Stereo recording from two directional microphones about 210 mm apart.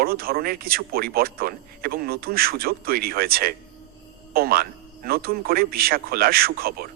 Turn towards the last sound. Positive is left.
turn(degrees=-45)  # may be behind; listen again after turning